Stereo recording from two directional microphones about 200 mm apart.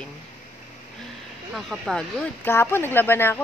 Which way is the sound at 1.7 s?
Centre (ahead or behind).